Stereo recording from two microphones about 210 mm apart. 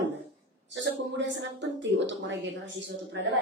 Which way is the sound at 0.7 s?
60° right (ahead or behind).